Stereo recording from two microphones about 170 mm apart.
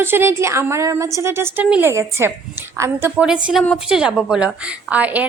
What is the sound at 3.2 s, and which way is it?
A woman's voice, 5° right (ahead or behind).